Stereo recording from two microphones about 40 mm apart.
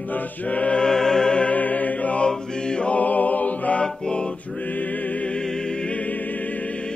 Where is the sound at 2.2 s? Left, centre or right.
Left.